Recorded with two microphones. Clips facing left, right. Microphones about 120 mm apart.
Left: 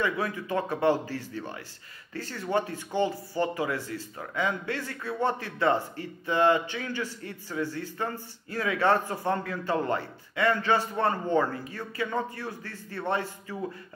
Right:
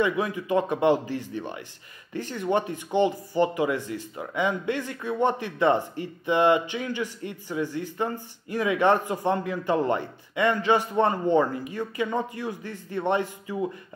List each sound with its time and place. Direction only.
0.0 s a man's voice: 15° right (ahead or behind)